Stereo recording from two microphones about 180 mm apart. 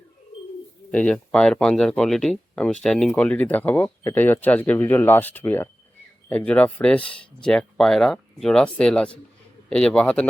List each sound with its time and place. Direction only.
0.9 s speech: 5° left (ahead or behind)